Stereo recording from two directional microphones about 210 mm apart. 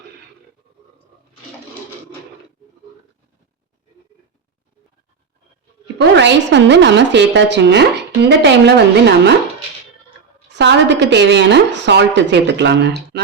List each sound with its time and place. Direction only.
6.0 s a woman's voice: 55° right (ahead or behind)
10.5 s a woman's voice: 55° right (ahead or behind)